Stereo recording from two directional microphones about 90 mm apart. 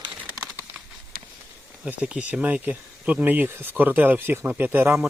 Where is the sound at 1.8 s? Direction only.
15° right (ahead or behind).